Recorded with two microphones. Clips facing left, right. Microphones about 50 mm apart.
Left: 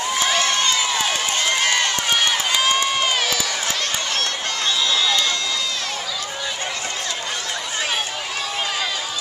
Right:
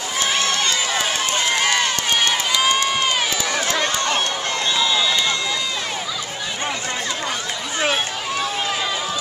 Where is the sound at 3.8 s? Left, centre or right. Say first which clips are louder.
Right 4 dB; centre.